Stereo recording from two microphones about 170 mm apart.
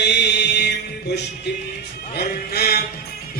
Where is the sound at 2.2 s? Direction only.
65° left (ahead or behind).